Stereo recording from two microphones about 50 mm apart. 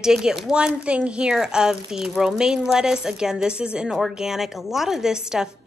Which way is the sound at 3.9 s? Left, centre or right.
Centre.